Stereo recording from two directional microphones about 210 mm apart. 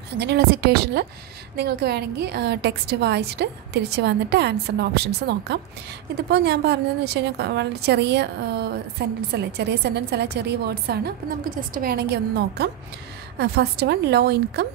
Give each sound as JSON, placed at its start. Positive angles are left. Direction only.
{"t": 0.2, "sound": "a woman's voice", "side_deg": -50}